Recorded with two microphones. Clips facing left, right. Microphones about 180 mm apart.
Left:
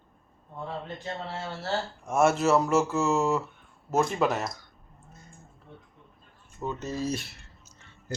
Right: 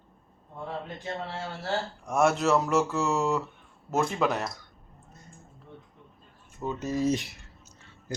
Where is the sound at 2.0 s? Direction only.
Centre (ahead or behind).